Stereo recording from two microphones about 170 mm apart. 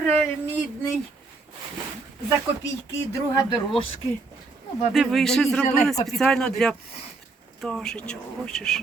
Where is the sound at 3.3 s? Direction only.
25° left (ahead or behind).